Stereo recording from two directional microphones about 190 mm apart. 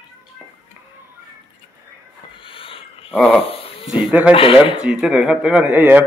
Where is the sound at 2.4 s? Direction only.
25° left (ahead or behind).